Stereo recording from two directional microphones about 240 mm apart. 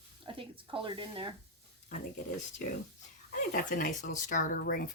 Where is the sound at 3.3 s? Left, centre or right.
Left.